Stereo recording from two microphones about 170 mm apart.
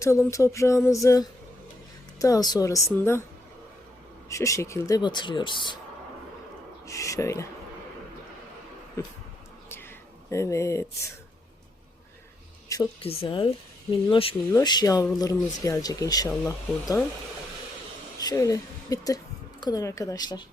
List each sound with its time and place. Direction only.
0.0 s a sound: 15° left (ahead or behind)
2.1 s speech: 20° left (ahead or behind)
4.3 s speech: 20° left (ahead or behind)
6.8 s speech: 20° left (ahead or behind)
9.0 s speech: 20° left (ahead or behind)
9.6 s whispering: 15° left (ahead or behind)
12.6 s a sound: 20° left (ahead or behind)
13.0 s speech: 35° left (ahead or behind)
18.2 s a woman's voice: 20° left (ahead or behind)